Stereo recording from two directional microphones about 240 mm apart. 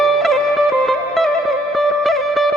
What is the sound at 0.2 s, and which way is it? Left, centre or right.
Music, centre.